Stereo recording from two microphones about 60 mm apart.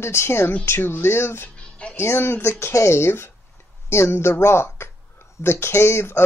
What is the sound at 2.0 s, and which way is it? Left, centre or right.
Speech, left.